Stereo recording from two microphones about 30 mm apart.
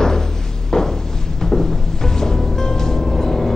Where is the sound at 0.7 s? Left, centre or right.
Left.